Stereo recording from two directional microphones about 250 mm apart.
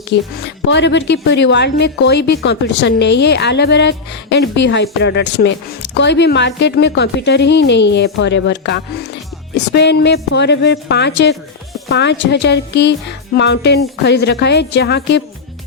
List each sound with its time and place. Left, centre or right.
0.1 s speech: left